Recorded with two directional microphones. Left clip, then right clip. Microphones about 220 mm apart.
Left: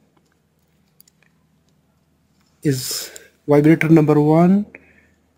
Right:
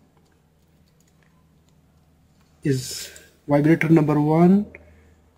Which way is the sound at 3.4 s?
50° left (ahead or behind).